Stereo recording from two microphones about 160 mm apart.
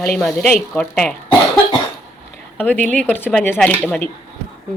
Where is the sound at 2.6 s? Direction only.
10° left (ahead or behind).